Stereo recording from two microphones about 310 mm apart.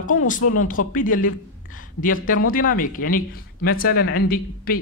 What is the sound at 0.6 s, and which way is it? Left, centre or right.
Speech, left.